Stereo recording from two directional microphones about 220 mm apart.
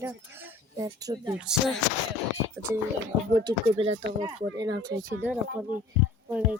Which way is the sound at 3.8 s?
25° right (ahead or behind).